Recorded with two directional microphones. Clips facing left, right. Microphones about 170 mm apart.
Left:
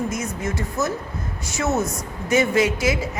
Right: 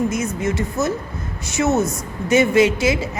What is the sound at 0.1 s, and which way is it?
A woman's voice, 25° right (ahead or behind).